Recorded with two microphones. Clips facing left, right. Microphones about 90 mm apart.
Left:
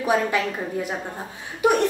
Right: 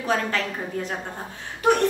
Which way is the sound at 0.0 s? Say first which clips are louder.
Left 3 dB; 15° left (ahead or behind).